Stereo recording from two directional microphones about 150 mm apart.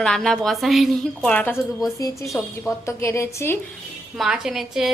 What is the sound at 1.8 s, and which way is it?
A woman's voice, 20° left (ahead or behind).